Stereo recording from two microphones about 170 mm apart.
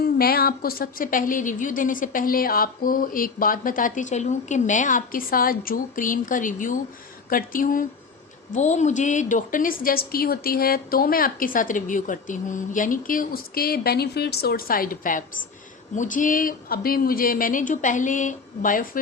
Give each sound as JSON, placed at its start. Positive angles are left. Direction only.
{"t": 0.0, "sound": "a woman's voice", "side_deg": 65}